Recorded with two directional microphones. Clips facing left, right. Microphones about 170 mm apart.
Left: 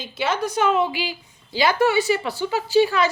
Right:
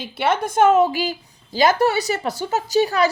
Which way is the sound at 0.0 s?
55° right (ahead or behind).